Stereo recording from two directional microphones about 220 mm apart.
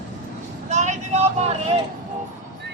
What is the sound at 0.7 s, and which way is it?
Vehicle, 30° right (ahead or behind).